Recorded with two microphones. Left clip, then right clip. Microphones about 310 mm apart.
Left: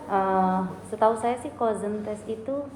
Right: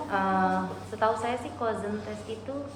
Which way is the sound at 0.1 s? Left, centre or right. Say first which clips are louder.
Left 3 dB; centre.